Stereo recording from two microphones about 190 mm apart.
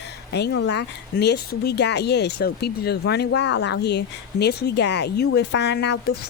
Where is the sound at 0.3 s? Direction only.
60° left (ahead or behind).